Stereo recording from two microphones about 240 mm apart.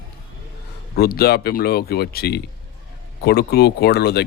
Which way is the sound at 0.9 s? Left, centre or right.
Left.